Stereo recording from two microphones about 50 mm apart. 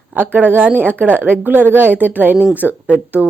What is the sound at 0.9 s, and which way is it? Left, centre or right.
A woman's voice, right.